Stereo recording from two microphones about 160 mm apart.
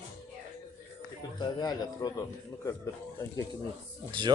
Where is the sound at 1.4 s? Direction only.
25° left (ahead or behind).